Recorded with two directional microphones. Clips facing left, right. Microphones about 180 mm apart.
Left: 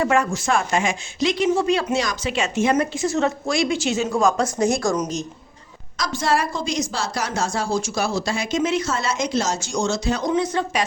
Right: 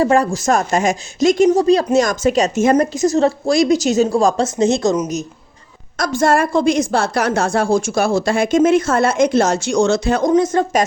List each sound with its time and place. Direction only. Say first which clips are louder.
0.0 s speech: right 6 dB; 35° right (ahead or behind)
4.9 s a woman's voice: right 4 dB; 5° right (ahead or behind)
6.0 s a woman's voice: right 7 dB; 50° right (ahead or behind)